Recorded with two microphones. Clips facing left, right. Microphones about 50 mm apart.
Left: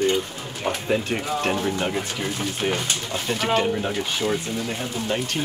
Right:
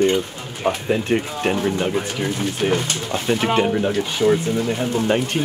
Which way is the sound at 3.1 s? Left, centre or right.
Right.